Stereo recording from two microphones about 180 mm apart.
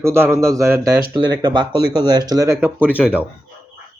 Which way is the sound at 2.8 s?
10° left (ahead or behind).